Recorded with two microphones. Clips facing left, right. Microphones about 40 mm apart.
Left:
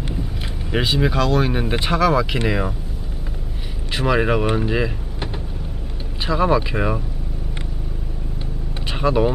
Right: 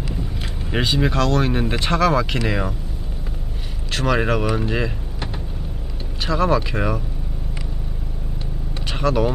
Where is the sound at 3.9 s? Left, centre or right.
Centre.